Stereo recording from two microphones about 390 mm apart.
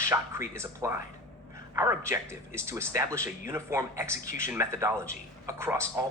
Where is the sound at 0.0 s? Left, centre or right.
Centre.